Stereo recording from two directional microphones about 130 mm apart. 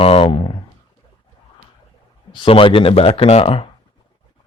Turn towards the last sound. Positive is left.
turn(degrees=45)  # may be behind; listen again after turning